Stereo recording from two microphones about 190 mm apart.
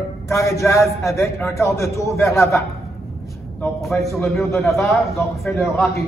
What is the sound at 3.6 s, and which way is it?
A man's voice, centre (ahead or behind).